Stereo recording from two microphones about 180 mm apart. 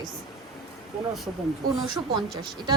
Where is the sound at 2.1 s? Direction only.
25° right (ahead or behind).